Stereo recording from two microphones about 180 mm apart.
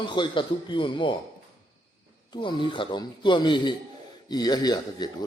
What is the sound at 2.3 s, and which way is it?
A man's voice, 25° left (ahead or behind).